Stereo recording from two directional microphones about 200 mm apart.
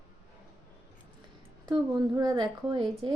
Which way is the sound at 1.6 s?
20° right (ahead or behind).